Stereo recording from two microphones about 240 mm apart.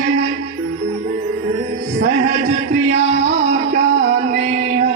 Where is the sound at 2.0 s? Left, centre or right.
Right.